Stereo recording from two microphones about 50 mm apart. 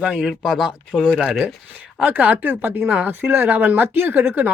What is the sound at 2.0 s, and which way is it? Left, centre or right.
Speech, right.